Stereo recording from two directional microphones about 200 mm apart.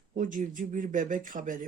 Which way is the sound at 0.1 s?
40° right (ahead or behind).